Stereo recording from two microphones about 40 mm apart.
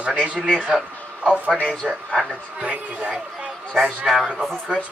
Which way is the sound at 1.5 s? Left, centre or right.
Left.